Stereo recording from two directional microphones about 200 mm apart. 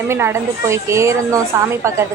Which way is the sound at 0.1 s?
15° right (ahead or behind).